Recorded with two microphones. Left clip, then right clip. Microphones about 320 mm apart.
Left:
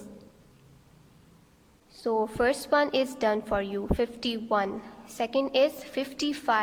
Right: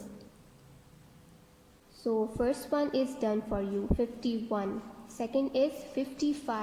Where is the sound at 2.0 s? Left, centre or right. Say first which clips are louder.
Left 4 dB; left.